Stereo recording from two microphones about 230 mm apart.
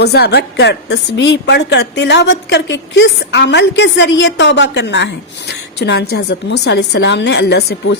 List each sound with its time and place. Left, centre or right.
0.0 s a woman's voice: left